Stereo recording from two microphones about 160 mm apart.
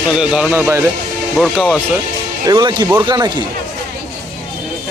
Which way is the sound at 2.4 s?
25° right (ahead or behind).